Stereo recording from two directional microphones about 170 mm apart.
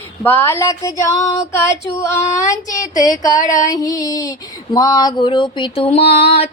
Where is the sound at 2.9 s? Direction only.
20° left (ahead or behind).